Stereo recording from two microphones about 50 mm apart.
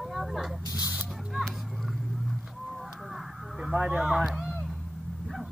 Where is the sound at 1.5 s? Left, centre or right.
Centre.